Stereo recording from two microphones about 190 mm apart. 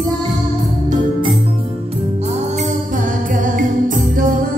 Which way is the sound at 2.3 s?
40° right (ahead or behind).